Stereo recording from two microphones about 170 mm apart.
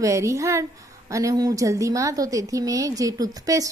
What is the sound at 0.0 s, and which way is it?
A woman's voice, 20° right (ahead or behind).